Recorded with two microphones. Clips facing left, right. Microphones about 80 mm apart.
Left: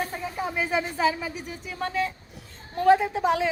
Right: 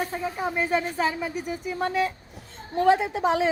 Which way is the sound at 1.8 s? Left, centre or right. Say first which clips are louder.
Right 2 dB; centre.